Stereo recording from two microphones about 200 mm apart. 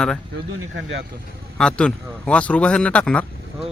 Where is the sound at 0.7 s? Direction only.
65° right (ahead or behind).